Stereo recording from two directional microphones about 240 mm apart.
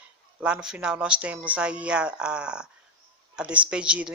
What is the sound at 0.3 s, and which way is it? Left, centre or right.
Speech, centre.